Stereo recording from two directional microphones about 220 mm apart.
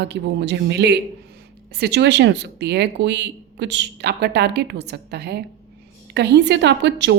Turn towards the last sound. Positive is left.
turn(degrees=-55)  # may be behind; listen again after turning